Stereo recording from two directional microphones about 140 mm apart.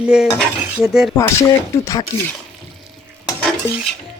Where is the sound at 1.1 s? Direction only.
20° left (ahead or behind).